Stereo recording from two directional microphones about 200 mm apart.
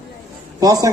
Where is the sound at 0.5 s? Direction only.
15° right (ahead or behind).